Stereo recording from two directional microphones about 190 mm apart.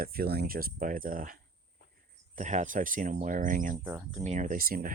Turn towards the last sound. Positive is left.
turn(degrees=-50)  # may be behind; listen again after turning